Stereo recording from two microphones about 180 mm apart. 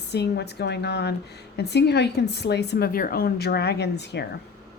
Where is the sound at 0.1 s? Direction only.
70° left (ahead or behind).